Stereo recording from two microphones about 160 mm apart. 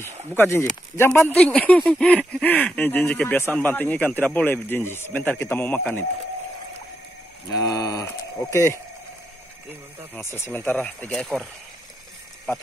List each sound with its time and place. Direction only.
0.4 s speech: 15° left (ahead or behind)
7.5 s speech: 25° left (ahead or behind)
10.1 s speech: 15° left (ahead or behind)